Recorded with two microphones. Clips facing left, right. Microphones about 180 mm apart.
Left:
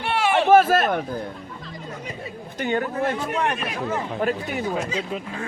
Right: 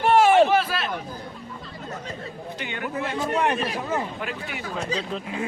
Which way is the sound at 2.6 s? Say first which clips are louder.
Left 7 dB; 45° left (ahead or behind).